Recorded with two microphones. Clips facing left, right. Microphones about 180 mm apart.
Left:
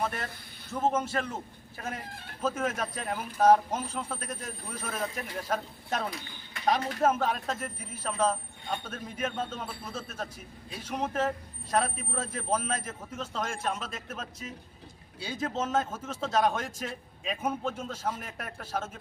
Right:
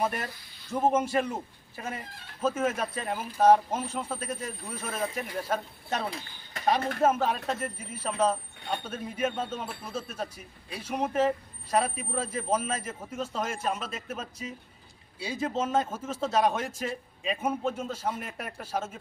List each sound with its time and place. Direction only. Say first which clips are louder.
0.0 s speech: right 3 dB; 10° right (ahead or behind)